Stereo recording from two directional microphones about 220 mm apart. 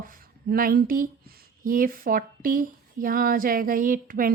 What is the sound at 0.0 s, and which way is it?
A woman's voice, 40° right (ahead or behind).